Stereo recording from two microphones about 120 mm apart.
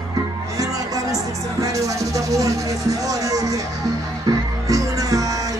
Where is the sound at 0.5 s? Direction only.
30° right (ahead or behind).